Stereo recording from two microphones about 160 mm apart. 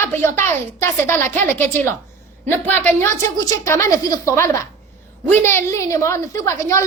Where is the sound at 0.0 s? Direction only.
15° left (ahead or behind).